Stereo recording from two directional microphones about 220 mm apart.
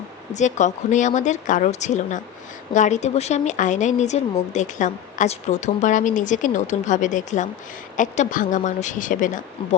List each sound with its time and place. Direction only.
0.3 s a woman's voice: 35° left (ahead or behind)